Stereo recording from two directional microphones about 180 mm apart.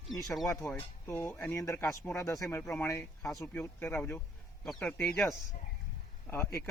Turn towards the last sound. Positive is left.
turn(degrees=15)  # may be behind; listen again after turning